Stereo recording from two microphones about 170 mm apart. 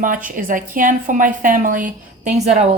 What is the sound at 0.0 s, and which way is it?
A woman's voice, 50° right (ahead or behind).